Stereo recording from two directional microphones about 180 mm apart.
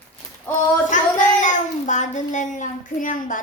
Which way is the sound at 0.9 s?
45° left (ahead or behind).